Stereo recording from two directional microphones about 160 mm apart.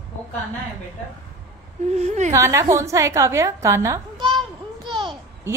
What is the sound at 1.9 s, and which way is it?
Speech, 45° right (ahead or behind).